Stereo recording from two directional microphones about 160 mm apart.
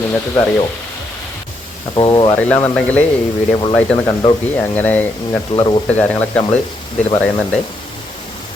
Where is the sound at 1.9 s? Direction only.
30° left (ahead or behind).